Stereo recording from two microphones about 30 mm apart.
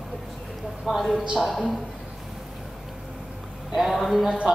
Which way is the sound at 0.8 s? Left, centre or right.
Centre.